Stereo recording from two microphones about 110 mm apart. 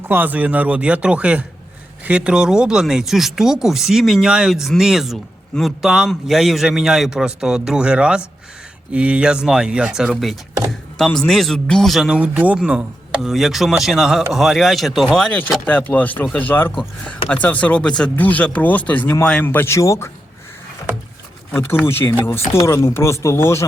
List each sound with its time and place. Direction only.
0.1 s speech: 15° right (ahead or behind); by 15.3 s centre (ahead or behind)
15.6 s speech: 15° left (ahead or behind)
21.5 s speech: 20° left (ahead or behind)